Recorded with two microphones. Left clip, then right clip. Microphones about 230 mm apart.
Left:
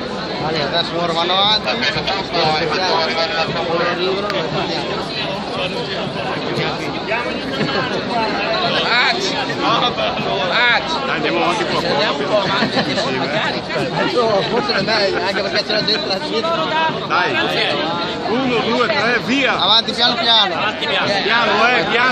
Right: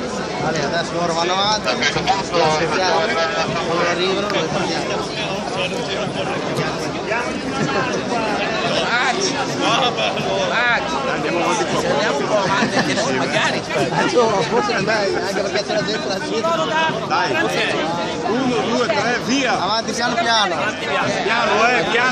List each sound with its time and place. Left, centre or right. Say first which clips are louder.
1.3 s speech: left 6 dB; centre
10.5 s speech: left 4 dB; left
18.8 s speech: left 2 dB; left
20.0 s speech: left 3 dB; centre
21.3 s speech: left 1 dB; centre